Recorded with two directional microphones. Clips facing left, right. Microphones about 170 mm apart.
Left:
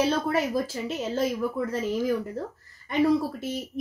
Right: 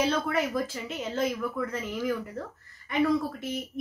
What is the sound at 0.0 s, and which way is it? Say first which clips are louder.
Speech: left 2 dB; 30° left (ahead or behind).